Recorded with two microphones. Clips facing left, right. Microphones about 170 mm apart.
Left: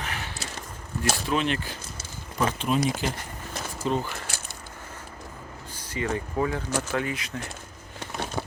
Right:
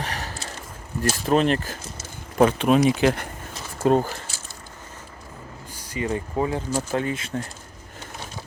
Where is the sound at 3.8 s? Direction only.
45° right (ahead or behind).